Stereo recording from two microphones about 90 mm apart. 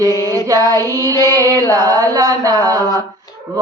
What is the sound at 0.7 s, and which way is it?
Female singing, 35° right (ahead or behind).